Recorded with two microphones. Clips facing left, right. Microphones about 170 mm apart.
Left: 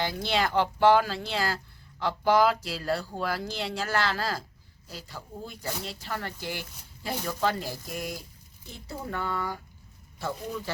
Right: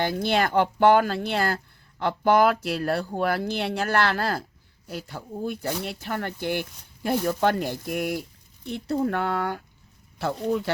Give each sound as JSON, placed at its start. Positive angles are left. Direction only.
{"t": 0.0, "sound": "speech", "side_deg": -55}